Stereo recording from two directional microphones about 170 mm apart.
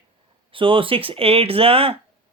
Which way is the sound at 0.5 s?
30° right (ahead or behind).